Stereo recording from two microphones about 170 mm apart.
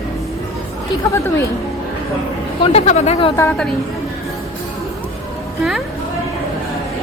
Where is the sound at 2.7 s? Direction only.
40° left (ahead or behind).